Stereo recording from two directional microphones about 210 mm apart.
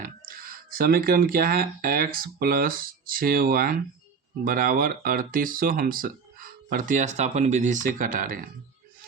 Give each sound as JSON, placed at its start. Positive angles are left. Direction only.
{"t": 0.0, "sound": "speech", "side_deg": -45}